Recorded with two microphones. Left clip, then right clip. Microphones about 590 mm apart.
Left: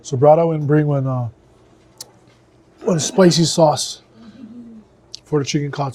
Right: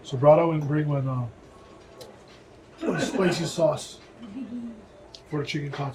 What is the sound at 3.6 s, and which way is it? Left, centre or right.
Speech, left.